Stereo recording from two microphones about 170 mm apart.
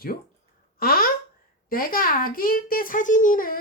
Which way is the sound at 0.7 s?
60° left (ahead or behind).